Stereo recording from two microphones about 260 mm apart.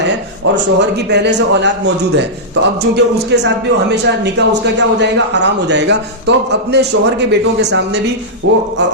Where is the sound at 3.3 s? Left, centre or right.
Right.